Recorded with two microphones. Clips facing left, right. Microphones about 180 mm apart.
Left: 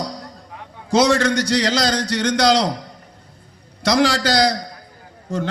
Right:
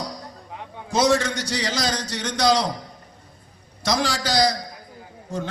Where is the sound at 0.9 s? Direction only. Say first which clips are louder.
Left 4 dB; 70° left (ahead or behind).